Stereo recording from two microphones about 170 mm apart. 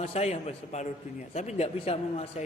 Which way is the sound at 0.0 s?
40° left (ahead or behind).